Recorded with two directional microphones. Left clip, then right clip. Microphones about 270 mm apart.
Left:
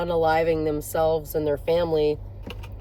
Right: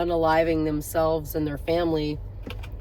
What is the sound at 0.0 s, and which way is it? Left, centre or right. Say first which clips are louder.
Speech: even; centre.